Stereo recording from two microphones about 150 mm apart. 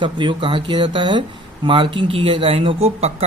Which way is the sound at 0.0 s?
35° right (ahead or behind).